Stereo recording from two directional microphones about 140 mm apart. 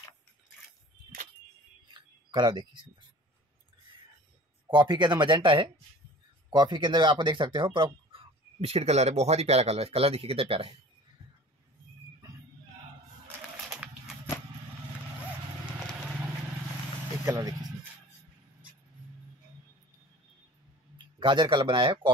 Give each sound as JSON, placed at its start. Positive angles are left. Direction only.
{"t": 2.0, "sound": "a sound", "side_deg": -30}
{"t": 4.7, "sound": "speech", "side_deg": -35}
{"t": 17.2, "sound": "speech", "side_deg": -25}
{"t": 21.2, "sound": "speech", "side_deg": -35}